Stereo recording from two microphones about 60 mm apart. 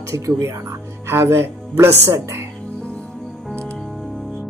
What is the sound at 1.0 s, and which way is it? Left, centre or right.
Speech, right.